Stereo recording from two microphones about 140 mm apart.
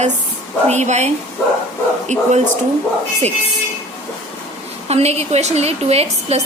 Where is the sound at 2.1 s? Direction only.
60° right (ahead or behind).